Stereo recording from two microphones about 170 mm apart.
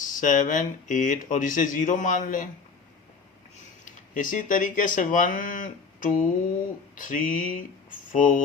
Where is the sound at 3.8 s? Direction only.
50° left (ahead or behind).